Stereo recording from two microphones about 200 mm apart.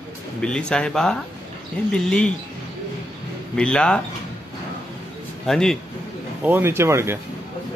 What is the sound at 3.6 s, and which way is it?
Speech, 5° left (ahead or behind).